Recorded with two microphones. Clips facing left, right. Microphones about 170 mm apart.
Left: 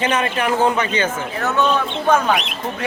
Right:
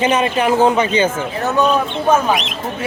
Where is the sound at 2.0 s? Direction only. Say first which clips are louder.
Right 1 dB; 10° right (ahead or behind).